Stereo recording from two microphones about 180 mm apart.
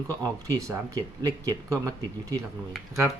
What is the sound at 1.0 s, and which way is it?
Speech, 20° right (ahead or behind).